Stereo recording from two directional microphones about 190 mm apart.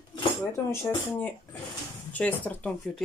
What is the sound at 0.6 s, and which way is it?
Speech, 10° left (ahead or behind).